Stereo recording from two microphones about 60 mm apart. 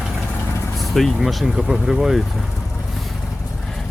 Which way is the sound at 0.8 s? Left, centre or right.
Centre.